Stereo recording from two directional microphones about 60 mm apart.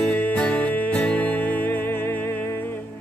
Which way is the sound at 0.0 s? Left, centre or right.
Left.